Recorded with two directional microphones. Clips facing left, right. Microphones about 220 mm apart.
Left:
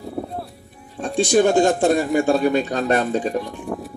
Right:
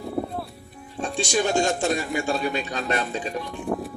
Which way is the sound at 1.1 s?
55° left (ahead or behind).